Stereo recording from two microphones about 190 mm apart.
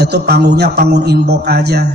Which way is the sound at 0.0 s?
55° right (ahead or behind).